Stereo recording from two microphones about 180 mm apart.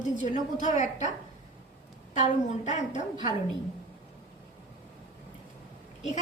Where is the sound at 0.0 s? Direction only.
45° left (ahead or behind).